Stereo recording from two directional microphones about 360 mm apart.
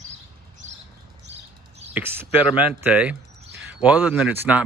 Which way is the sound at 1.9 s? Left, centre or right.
Centre.